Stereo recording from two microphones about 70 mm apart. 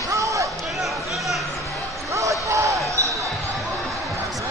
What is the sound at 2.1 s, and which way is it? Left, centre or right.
Basketball bounce, right.